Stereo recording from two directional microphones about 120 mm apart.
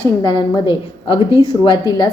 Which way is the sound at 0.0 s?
35° left (ahead or behind).